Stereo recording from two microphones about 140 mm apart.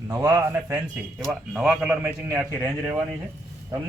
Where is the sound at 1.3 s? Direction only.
Centre (ahead or behind).